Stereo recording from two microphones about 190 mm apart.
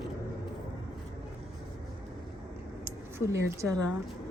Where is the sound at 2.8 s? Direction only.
15° right (ahead or behind).